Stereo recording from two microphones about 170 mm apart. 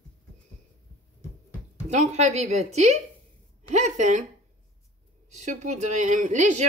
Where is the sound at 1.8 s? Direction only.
40° right (ahead or behind).